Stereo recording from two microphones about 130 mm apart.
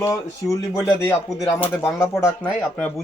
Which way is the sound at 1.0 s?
15° left (ahead or behind).